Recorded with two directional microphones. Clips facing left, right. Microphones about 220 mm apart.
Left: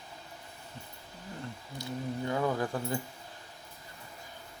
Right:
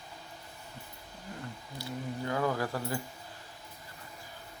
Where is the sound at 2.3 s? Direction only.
20° left (ahead or behind).